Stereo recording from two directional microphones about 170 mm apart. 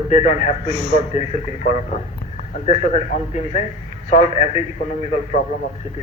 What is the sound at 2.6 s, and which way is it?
A man's voice, 40° left (ahead or behind).